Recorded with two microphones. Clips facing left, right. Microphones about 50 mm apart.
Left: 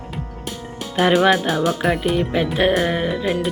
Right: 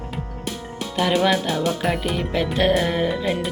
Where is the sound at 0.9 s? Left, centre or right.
Left.